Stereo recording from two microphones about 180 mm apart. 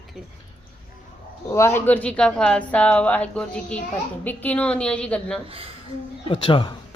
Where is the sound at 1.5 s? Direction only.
15° left (ahead or behind).